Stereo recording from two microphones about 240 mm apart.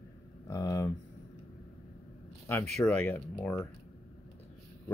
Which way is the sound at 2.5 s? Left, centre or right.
Centre.